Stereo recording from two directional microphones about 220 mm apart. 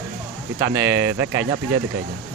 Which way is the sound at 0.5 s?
10° right (ahead or behind).